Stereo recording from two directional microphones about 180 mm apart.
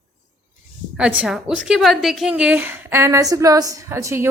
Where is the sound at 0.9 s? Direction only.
5° right (ahead or behind).